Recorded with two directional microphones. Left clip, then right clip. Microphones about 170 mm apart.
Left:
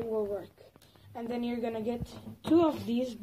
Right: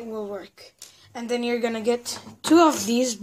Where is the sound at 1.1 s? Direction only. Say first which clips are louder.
Right 10 dB; 65° right (ahead or behind).